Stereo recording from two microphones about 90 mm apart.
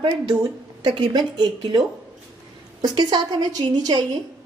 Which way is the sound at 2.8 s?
55° right (ahead or behind).